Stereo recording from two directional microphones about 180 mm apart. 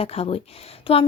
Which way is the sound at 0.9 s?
30° left (ahead or behind).